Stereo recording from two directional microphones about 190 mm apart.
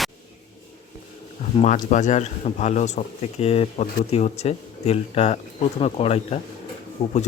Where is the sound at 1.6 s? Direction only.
40° left (ahead or behind).